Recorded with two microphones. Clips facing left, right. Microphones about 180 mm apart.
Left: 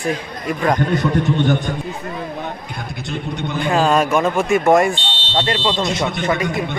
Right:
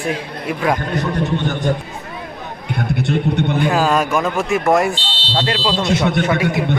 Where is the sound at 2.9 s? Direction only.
60° right (ahead or behind).